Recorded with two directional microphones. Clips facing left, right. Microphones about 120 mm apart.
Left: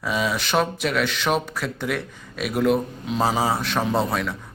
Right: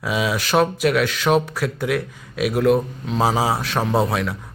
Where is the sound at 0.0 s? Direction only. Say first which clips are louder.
Right 2 dB; 5° right (ahead or behind).